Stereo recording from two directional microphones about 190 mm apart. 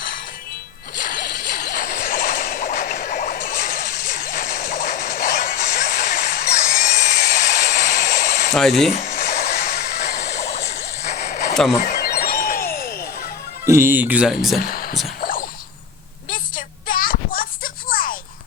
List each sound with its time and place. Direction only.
0.9 s a sound: 45° left (ahead or behind)
8.5 s speech: centre (ahead or behind)
8.9 s a sound: 40° left (ahead or behind); by 10.3 s 60° left (ahead or behind)
10.3 s fowl: 35° left (ahead or behind)
11.5 s speech: centre (ahead or behind)
11.8 s music: 45° left (ahead or behind)
13.7 s speech: 15° right (ahead or behind)
14.6 s speech: 50° left (ahead or behind)
15.2 s a sound: 50° left (ahead or behind)